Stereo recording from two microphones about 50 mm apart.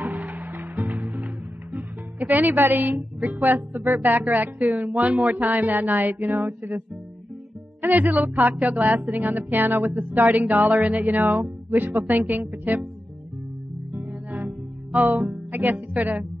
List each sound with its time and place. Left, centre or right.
0.0 s music: right
2.6 s a woman's voice: right
3.7 s a woman's voice: right
4.1 s a woman's voice: right
7.9 s a woman's voice: right
9.9 s a woman's voice: right
15.0 s a woman's voice: right